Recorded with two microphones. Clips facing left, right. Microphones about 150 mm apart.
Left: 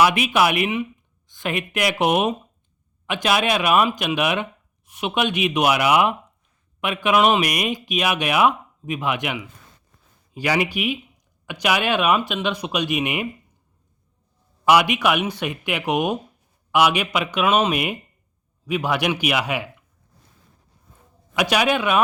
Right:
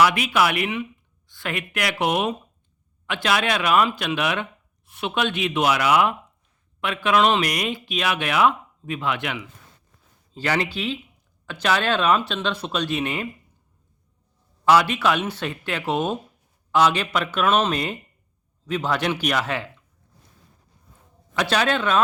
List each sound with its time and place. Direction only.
0.0 s speech: 20° left (ahead or behind)
14.6 s speech: 15° left (ahead or behind)
21.3 s speech: 10° left (ahead or behind)